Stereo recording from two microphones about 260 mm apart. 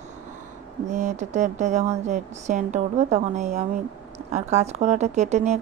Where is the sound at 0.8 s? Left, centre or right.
Right.